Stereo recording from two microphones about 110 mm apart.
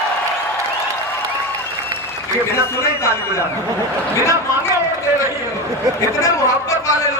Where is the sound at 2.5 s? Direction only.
25° left (ahead or behind).